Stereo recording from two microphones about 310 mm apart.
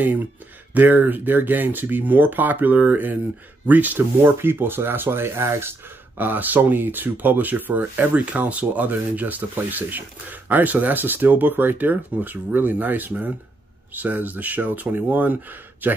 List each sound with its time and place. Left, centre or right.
0.7 s speech: centre